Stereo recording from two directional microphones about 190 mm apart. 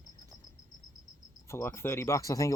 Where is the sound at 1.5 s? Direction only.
15° left (ahead or behind).